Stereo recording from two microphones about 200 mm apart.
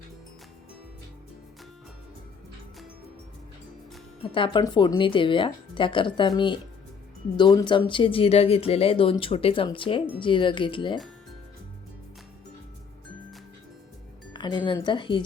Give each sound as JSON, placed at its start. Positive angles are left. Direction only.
{"t": 4.2, "sound": "speech", "side_deg": 25}
{"t": 14.3, "sound": "speech", "side_deg": 20}